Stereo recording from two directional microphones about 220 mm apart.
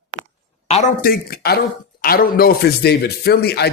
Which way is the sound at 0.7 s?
30° left (ahead or behind).